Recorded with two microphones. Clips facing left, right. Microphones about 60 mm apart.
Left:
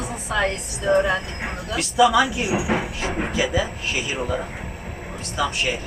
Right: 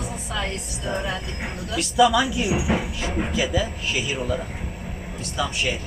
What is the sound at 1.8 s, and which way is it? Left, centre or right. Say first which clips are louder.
Speech: left 1 dB; left.